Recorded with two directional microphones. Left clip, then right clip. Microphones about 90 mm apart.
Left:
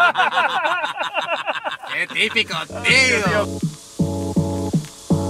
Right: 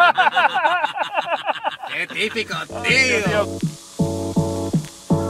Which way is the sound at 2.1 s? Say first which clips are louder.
Left 6 dB; centre (ahead or behind).